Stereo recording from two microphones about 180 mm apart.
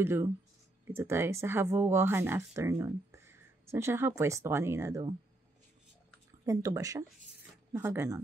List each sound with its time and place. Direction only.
0.0 s speech: 15° right (ahead or behind)
6.4 s speech: 15° right (ahead or behind)